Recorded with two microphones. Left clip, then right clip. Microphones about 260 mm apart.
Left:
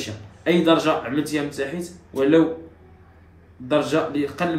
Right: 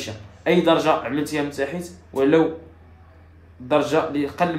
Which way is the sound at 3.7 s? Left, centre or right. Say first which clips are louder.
Right 1 dB; right.